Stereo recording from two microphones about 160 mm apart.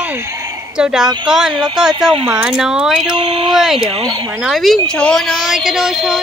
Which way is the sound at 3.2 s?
35° right (ahead or behind).